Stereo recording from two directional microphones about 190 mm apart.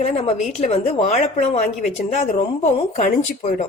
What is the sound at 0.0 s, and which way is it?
A woman's voice, 35° left (ahead or behind).